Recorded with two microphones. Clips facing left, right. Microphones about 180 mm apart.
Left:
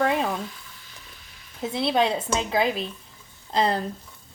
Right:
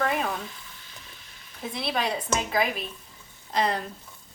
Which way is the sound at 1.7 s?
25° left (ahead or behind).